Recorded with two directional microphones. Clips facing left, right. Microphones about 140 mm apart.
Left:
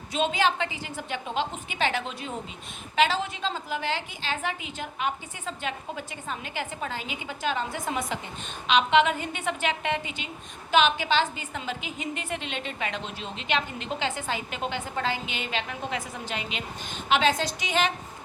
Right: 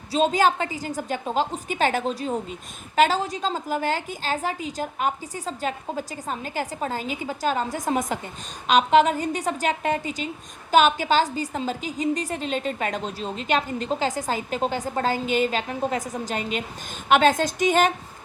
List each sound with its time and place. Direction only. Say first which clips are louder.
0.1 s a woman's voice: right 5 dB; 40° right (ahead or behind)